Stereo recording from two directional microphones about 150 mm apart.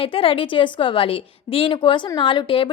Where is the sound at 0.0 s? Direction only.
40° left (ahead or behind).